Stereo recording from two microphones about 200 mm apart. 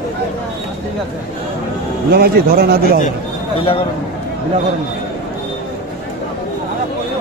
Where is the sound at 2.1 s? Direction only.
50° right (ahead or behind).